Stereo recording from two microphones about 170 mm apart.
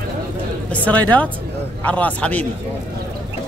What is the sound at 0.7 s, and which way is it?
Speech, 10° left (ahead or behind).